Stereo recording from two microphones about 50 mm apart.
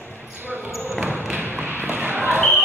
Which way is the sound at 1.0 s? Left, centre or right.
Right.